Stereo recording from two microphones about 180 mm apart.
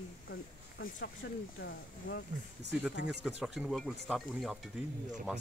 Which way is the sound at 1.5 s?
90° left.